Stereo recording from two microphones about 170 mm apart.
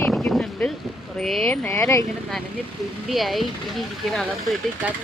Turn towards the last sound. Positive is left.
turn(degrees=0)  # may be behind; listen again after turning